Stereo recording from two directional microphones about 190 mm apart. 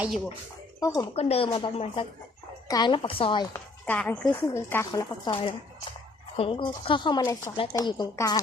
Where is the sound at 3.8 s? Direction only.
10° left (ahead or behind).